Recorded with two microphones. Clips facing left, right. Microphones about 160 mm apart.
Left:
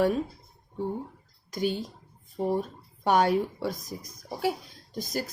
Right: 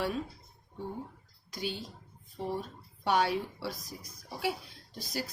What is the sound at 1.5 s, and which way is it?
A woman's voice, 45° left (ahead or behind).